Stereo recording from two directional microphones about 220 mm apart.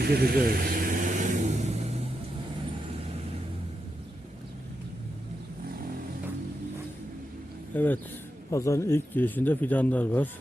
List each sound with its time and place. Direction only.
0.0 s vehicle: 45° right (ahead or behind)
7.7 s speech: 10° left (ahead or behind)